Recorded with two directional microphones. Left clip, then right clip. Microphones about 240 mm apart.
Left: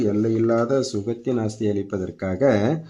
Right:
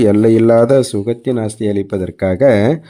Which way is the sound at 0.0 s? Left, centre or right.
Right.